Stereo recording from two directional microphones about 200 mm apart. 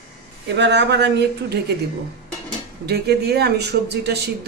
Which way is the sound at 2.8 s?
55° right (ahead or behind).